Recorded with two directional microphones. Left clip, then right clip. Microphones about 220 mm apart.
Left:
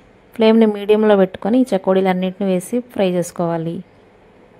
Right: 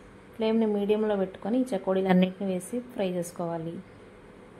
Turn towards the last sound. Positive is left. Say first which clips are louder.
# left 12 dB
turn(degrees=50)  # may be behind; listen again after turning